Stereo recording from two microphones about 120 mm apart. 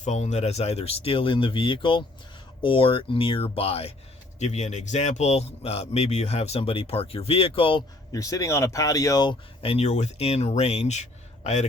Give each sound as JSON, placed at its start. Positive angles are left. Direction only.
{"t": 0.0, "sound": "speech", "side_deg": 70}
{"t": 4.4, "sound": "speech", "side_deg": 70}
{"t": 8.1, "sound": "speech", "side_deg": 30}
{"t": 9.6, "sound": "speech", "side_deg": 60}